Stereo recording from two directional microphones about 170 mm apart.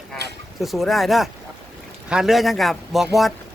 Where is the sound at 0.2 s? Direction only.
80° right.